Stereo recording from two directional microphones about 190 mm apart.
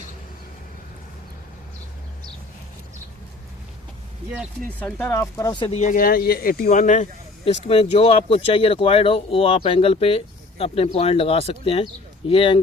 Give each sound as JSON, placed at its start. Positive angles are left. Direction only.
{"t": 4.8, "sound": "speech", "side_deg": 10}
{"t": 5.7, "sound": "speech", "side_deg": 40}